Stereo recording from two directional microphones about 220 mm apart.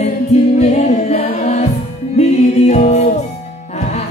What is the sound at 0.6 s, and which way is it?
Music, 30° left (ahead or behind).